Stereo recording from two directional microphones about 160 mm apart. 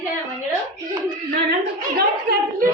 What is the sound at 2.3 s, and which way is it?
Speech, 70° right (ahead or behind).